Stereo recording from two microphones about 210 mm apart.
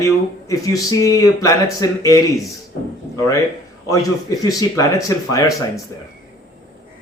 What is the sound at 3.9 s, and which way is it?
Speech, 15° left (ahead or behind).